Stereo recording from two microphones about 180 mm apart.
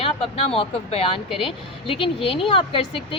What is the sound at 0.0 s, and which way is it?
Speech, 30° left (ahead or behind).